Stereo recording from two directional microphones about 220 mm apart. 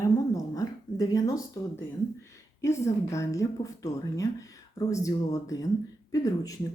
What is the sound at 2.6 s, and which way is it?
Speech, 15° left (ahead or behind).